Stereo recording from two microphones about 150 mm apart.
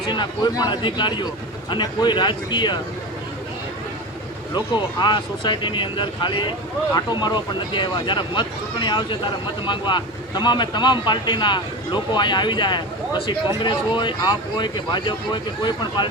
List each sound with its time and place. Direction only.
0.1 s speech: 30° left (ahead or behind)
4.5 s speech: 30° left (ahead or behind)